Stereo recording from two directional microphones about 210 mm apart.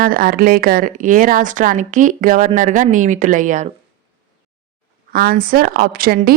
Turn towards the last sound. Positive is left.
turn(degrees=-45)  # may be behind; listen again after turning